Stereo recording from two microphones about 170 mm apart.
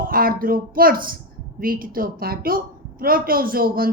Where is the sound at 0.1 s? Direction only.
60° right (ahead or behind).